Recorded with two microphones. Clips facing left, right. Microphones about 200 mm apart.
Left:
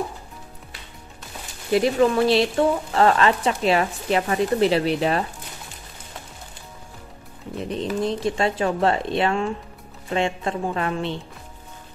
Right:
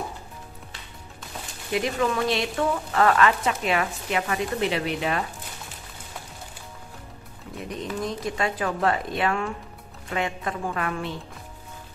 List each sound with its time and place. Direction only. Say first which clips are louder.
1.7 s speech: left 7 dB; 35° left (ahead or behind)
7.5 s speech: left 6 dB; 30° left (ahead or behind)